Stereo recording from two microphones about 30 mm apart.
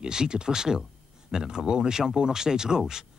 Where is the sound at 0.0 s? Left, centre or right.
Right.